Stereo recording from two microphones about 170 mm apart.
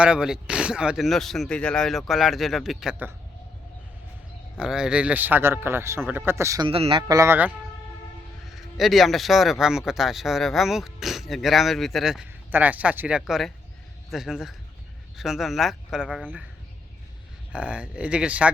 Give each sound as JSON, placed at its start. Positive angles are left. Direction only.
{"t": 0.0, "sound": "speech", "side_deg": -5}
{"t": 4.5, "sound": "a man's voice", "side_deg": -5}
{"t": 6.7, "sound": "a man's voice", "side_deg": -35}
{"t": 7.1, "sound": "a man's voice", "side_deg": -15}
{"t": 8.4, "sound": "speech", "side_deg": 0}
{"t": 17.5, "sound": "a man's voice", "side_deg": -5}